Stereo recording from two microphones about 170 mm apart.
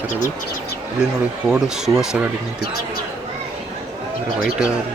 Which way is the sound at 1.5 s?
5° right (ahead or behind).